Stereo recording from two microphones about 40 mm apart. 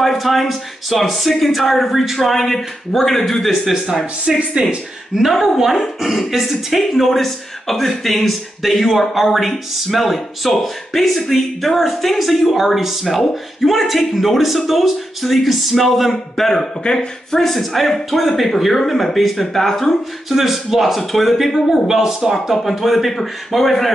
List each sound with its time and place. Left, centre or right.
0.0 s speech: centre
4.4 s a woman's voice: right; by 17.4 s centre
17.4 s speech: centre
20.2 s speech: centre